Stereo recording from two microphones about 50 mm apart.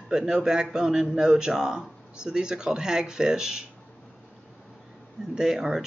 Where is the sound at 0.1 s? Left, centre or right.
Centre.